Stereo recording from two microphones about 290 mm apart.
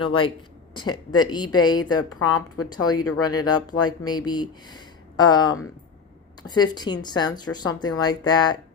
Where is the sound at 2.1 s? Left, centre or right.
Left.